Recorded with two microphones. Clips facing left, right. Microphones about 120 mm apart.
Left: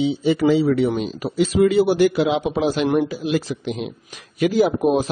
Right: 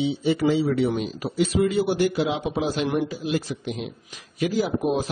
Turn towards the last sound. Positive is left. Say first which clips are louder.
# left 6 dB
turn(degrees=70)  # may be behind; listen again after turning